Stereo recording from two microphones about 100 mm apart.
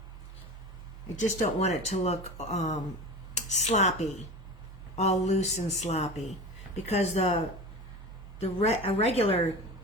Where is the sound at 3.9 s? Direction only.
90° left.